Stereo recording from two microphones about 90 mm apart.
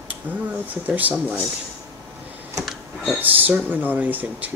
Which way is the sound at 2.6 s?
Centre (ahead or behind).